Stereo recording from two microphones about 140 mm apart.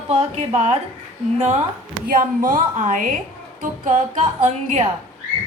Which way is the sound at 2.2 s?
65° right (ahead or behind).